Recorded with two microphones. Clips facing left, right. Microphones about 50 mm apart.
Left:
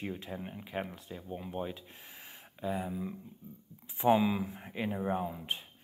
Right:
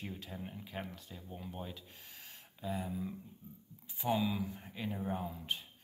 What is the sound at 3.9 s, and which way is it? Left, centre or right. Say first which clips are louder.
Speech: left 7 dB; left.